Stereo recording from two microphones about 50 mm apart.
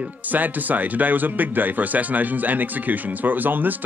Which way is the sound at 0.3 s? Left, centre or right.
Right.